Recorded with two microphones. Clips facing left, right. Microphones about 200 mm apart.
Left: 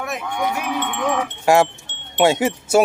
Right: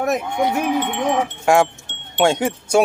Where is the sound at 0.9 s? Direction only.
25° right (ahead or behind).